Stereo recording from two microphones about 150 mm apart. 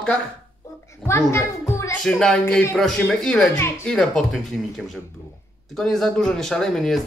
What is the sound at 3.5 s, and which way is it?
Speech, 20° left (ahead or behind).